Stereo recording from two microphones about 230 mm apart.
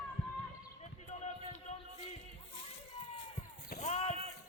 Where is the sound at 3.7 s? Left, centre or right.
Left.